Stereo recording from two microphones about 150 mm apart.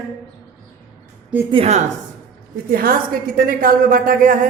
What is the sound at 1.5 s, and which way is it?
Speech, 40° right (ahead or behind).